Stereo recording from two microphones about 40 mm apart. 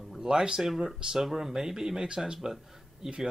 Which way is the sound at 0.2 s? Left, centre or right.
Centre.